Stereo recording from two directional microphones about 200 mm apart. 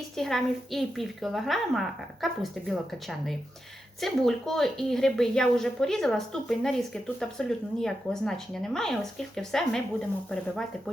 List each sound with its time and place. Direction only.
0.2 s a woman's voice: centre (ahead or behind)